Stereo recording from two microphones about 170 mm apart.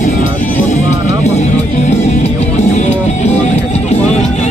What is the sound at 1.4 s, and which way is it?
Music, 40° left (ahead or behind).